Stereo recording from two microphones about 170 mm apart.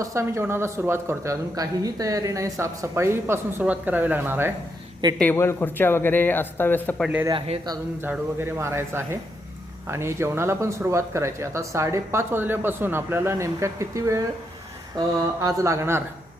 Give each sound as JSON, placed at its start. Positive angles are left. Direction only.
{"t": 0.0, "sound": "speech", "side_deg": -15}
{"t": 5.1, "sound": "a man's voice", "side_deg": 10}
{"t": 7.0, "sound": "speech", "side_deg": -5}
{"t": 7.3, "sound": "a man's voice", "side_deg": -30}
{"t": 8.0, "sound": "speech", "side_deg": -10}